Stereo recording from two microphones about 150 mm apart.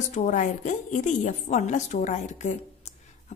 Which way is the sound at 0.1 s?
55° left (ahead or behind).